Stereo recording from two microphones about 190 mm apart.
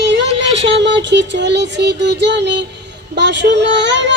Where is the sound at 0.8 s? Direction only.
65° right (ahead or behind).